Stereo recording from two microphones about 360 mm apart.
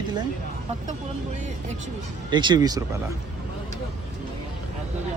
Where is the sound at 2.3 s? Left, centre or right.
Centre.